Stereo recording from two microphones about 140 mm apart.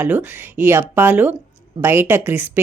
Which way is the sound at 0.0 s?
15° right (ahead or behind).